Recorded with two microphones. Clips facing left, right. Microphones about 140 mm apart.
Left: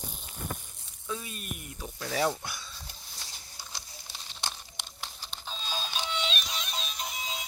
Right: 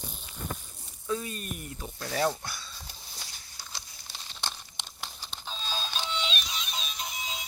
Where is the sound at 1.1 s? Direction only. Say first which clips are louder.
Right 5 dB; 5° left (ahead or behind).